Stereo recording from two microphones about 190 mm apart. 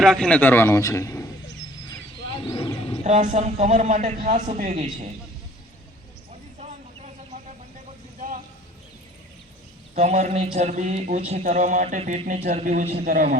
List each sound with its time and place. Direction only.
0.0 s a man's voice: 5° left (ahead or behind)
2.4 s roaring cats: 25° left (ahead or behind)
3.0 s a man's voice: 40° right (ahead or behind)
6.6 s vehicle: 35° right (ahead or behind)
9.9 s a man's voice: 40° right (ahead or behind)